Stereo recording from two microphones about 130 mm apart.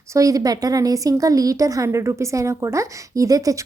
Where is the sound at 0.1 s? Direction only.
25° right (ahead or behind).